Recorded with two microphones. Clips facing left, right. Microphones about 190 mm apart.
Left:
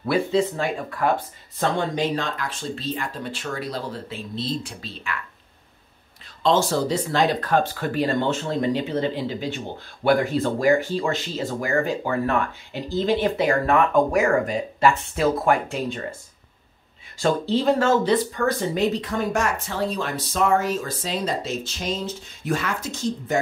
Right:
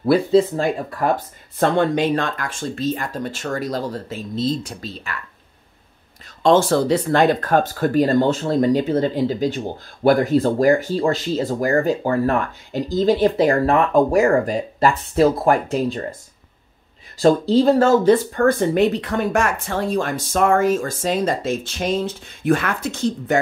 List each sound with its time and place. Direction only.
0.0 s speech: 35° right (ahead or behind)
1.6 s speech: 60° right (ahead or behind); by 5.2 s 40° right (ahead or behind)
6.4 s speech: 55° right (ahead or behind); by 16.0 s 40° right (ahead or behind)
17.2 s speech: 40° right (ahead or behind); by 23.3 s 60° right (ahead or behind)